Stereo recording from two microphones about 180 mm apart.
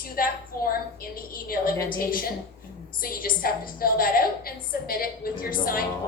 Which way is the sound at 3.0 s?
55° left (ahead or behind).